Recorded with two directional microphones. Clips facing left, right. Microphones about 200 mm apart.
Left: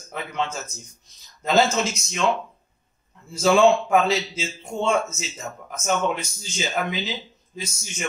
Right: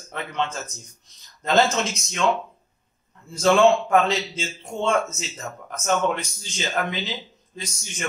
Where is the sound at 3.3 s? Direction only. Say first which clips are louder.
Even; 5° left (ahead or behind).